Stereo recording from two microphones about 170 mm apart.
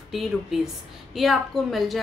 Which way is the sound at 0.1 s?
Centre (ahead or behind).